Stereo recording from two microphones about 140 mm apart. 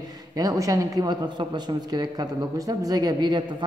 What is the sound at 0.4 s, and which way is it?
A man's voice, 25° right (ahead or behind).